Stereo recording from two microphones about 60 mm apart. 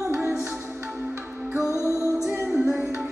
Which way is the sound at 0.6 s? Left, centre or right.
Right.